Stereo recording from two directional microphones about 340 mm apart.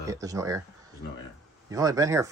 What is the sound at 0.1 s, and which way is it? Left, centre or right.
Speech, centre.